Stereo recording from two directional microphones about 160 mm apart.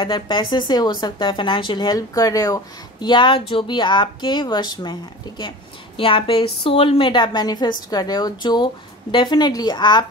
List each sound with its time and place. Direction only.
0.0 s speech: 30° left (ahead or behind)
5.9 s a woman's voice: 35° left (ahead or behind)